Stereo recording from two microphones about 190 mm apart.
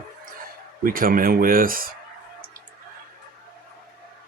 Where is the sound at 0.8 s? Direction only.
50° right (ahead or behind).